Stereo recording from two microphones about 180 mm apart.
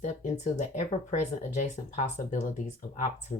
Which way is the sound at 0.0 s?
40° left (ahead or behind).